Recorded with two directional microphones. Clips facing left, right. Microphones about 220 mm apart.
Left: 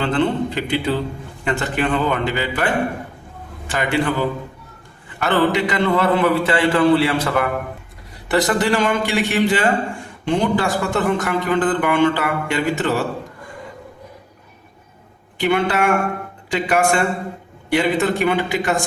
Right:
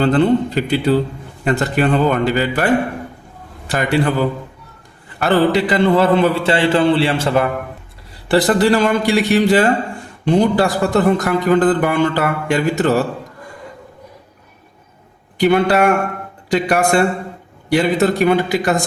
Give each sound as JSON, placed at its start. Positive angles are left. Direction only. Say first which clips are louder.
{"t": 0.0, "sound": "a man's voice", "louder": "right 5 dB", "side_deg": -40}
{"t": 3.7, "sound": "a man's voice", "louder": "right 3 dB", "side_deg": -40}
{"t": 5.2, "sound": "a man's voice", "louder": "right 3 dB", "side_deg": -35}
{"t": 15.4, "sound": "a man's voice", "louder": "right 5 dB", "side_deg": -40}